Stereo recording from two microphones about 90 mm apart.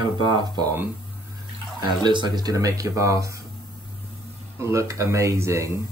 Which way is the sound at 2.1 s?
55° right (ahead or behind).